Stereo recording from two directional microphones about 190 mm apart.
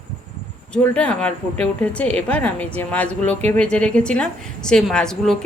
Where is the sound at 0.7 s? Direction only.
5° left (ahead or behind).